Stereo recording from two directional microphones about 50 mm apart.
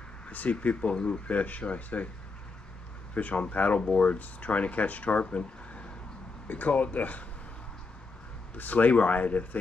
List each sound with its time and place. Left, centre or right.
0.3 s speech: left
3.2 s speech: left
5.2 s a sound: left
6.4 s speech: left
8.5 s speech: left